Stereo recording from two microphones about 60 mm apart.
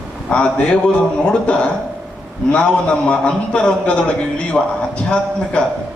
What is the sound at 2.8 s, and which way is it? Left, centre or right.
A man's voice, centre.